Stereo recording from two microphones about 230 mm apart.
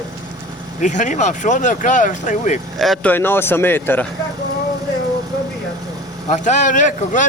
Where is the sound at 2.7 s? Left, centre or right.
Centre.